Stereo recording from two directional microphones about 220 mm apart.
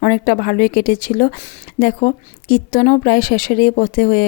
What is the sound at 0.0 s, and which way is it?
A woman's voice, 40° left (ahead or behind).